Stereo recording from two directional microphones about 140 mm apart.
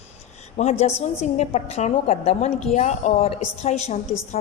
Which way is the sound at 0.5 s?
50° left (ahead or behind).